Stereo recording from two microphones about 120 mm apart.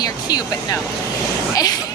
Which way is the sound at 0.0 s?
30° left (ahead or behind).